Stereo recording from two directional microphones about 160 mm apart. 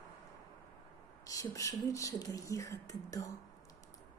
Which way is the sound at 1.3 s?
20° left (ahead or behind).